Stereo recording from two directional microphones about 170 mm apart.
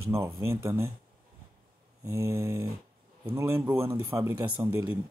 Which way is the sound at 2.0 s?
15° right (ahead or behind).